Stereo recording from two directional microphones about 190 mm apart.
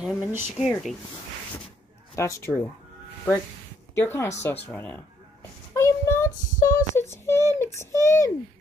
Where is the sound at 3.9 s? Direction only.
10° left (ahead or behind).